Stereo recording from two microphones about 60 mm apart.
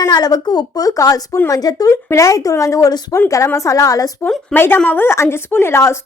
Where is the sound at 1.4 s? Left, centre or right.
Left.